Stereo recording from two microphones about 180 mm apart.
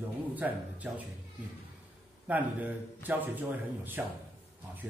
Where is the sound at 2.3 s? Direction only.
10° right (ahead or behind).